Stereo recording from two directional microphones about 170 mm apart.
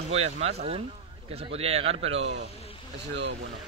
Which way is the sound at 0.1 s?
40° right (ahead or behind).